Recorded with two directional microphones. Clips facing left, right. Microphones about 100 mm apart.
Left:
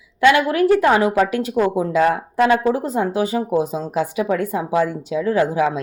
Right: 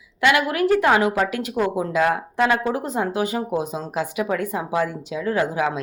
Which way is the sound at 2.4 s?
20° left (ahead or behind).